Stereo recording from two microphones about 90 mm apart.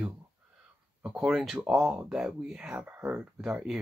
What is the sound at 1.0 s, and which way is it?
Speech, 10° right (ahead or behind).